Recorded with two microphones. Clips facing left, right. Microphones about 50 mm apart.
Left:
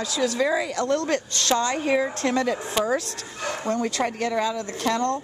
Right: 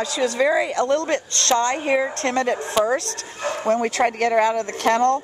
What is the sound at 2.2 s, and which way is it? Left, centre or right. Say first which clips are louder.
Speech: right 1 dB; right.